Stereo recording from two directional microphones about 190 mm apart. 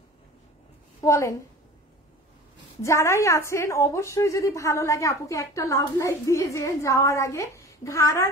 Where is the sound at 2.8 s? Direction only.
15° left (ahead or behind).